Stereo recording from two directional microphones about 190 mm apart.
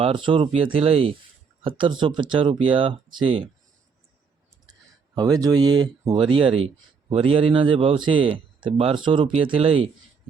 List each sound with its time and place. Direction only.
0.0 s a man's voice: 25° right (ahead or behind)
4.6 s a man's voice: 20° right (ahead or behind)